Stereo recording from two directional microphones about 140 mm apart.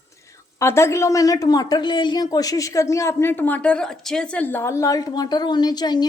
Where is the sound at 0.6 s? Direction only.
20° left (ahead or behind).